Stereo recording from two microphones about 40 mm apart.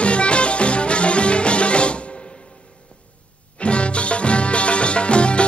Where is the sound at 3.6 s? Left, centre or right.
Left.